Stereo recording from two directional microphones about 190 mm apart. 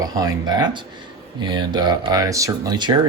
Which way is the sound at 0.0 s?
20° right (ahead or behind).